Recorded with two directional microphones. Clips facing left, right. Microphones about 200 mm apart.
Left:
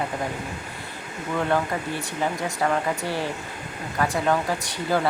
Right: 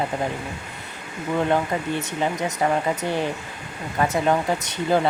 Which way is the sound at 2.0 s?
20° right (ahead or behind).